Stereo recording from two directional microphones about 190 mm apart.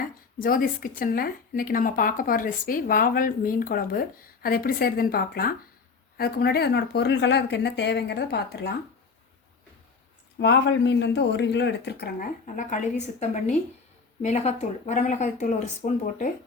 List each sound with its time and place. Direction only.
0.3 s speech: 50° left (ahead or behind)
10.3 s speech: 65° left (ahead or behind)
12.5 s speech: 40° left (ahead or behind)